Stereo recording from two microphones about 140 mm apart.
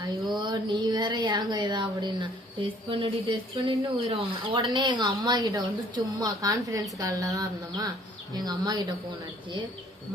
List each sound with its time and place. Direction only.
0.3 s speech: 30° right (ahead or behind)